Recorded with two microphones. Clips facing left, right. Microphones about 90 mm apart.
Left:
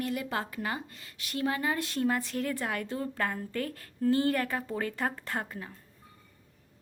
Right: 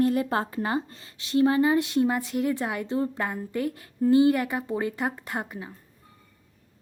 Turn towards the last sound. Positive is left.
turn(degrees=-15)  # may be behind; listen again after turning